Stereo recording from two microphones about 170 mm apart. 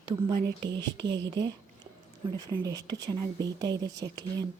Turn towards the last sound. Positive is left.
turn(degrees=-20)  # may be behind; listen again after turning